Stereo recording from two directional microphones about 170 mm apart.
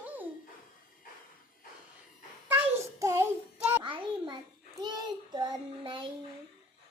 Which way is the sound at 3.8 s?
25° right (ahead or behind).